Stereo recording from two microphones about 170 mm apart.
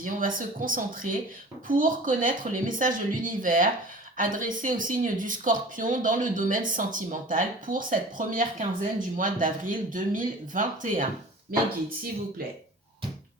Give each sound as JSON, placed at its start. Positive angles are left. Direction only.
{"t": 0.0, "sound": "speech", "side_deg": -55}